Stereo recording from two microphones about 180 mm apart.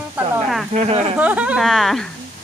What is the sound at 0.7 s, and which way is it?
Speech, 40° right (ahead or behind).